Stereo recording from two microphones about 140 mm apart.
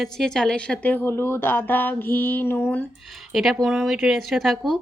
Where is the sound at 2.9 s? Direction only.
Centre (ahead or behind).